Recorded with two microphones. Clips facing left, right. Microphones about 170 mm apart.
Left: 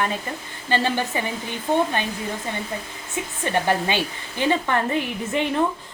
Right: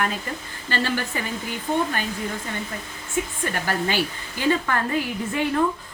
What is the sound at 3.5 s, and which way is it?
Speech, 20° left (ahead or behind).